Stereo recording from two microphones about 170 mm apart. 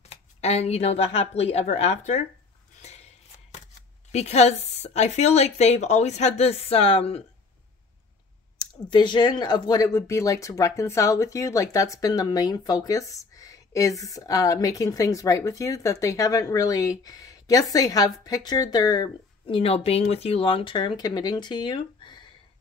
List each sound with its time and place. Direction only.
0.0 s speech: 40° left (ahead or behind)
2.8 s a sound: 40° left (ahead or behind)
4.1 s speech: 40° left (ahead or behind)
8.9 s speech: 25° left (ahead or behind)